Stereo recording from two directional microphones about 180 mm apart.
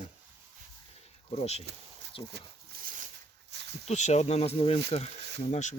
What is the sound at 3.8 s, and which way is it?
Speech, 40° left (ahead or behind).